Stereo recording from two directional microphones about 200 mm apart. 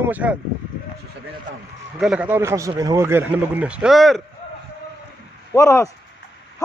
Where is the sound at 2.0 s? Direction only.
5° right (ahead or behind).